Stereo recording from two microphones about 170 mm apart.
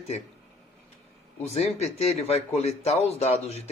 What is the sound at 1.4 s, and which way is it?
Speech, 40° left (ahead or behind).